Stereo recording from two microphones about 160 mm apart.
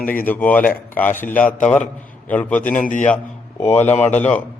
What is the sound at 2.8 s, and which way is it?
Speech, 55° left (ahead or behind).